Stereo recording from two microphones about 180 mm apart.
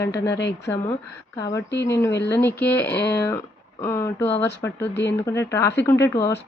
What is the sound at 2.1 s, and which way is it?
Speech, 70° left (ahead or behind).